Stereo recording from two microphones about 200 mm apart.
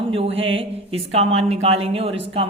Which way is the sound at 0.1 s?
30° right (ahead or behind).